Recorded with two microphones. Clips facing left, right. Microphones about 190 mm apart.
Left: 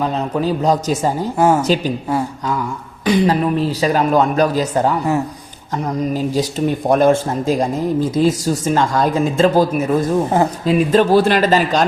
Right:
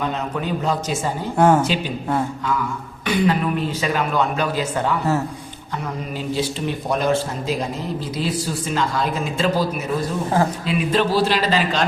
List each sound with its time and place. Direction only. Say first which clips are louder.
0.0 s a man's voice: left 6 dB; 35° left (ahead or behind)
1.4 s speech: even; 10° left (ahead or behind)
1.6 s a man's voice: left 6 dB; 40° left (ahead or behind)
3.0 s a man's voice: left 5 dB; 35° left (ahead or behind)